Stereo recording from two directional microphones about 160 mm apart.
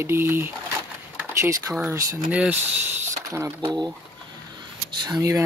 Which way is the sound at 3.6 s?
25° right (ahead or behind).